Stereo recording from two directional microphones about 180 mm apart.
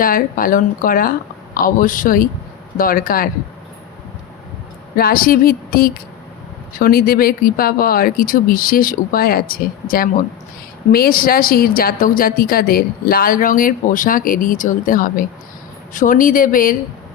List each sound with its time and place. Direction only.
0.0 s a woman's voice: 50° left (ahead or behind)
4.9 s a woman's voice: 55° left (ahead or behind)